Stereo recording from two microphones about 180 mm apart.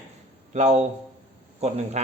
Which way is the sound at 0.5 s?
40° right (ahead or behind).